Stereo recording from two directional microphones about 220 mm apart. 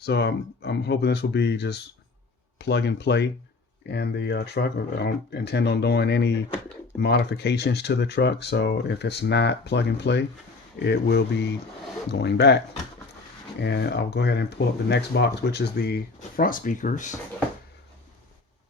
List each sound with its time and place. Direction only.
0.0 s speech: 50° left (ahead or behind)
13.6 s speech: 50° left (ahead or behind); by 17.2 s 35° left (ahead or behind)